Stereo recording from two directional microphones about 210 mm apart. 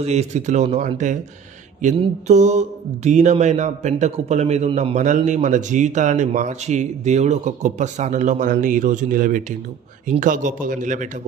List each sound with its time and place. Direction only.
0.0 s mantra: 30° right (ahead or behind)